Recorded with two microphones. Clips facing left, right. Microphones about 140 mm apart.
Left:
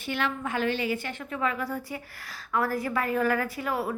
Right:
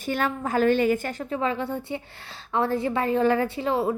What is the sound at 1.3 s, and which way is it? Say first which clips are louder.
A woman's voice: right 3 dB; 30° right (ahead or behind).